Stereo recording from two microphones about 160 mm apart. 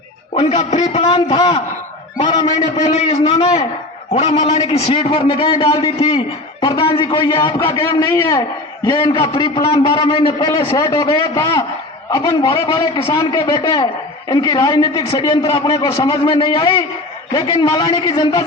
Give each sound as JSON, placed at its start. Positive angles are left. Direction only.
{"t": 0.3, "sound": "a man's voice", "side_deg": 45}
{"t": 2.9, "sound": "a man's voice", "side_deg": 45}
{"t": 15.6, "sound": "a man's voice", "side_deg": 20}